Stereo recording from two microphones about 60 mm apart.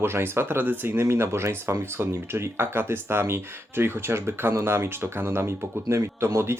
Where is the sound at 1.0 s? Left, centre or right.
Right.